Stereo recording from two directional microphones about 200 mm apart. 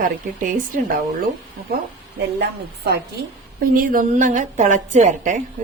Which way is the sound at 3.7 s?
45° right (ahead or behind).